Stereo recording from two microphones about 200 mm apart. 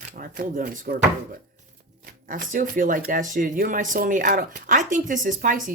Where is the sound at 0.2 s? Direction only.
45° right (ahead or behind).